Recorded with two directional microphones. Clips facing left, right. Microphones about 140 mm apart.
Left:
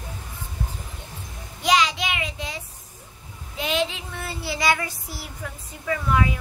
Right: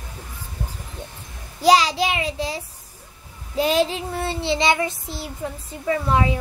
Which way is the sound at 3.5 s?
35° right (ahead or behind).